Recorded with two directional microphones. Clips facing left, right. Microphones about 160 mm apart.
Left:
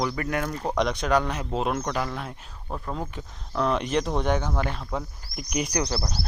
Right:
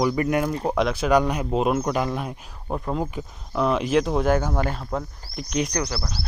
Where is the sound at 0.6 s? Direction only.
5° right (ahead or behind).